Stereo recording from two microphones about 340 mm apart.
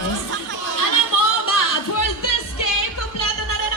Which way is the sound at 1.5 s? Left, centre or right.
Left.